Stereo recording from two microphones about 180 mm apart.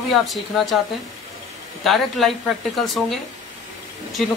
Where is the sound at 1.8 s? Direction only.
Centre (ahead or behind).